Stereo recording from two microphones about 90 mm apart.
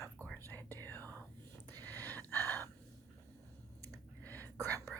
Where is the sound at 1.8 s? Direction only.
20° left (ahead or behind).